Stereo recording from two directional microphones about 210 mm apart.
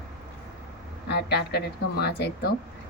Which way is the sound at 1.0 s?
50° left (ahead or behind).